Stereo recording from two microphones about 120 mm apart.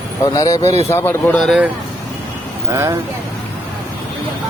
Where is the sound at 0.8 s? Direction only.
20° left (ahead or behind).